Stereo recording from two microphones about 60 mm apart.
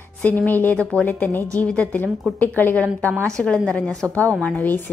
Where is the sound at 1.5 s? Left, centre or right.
Left.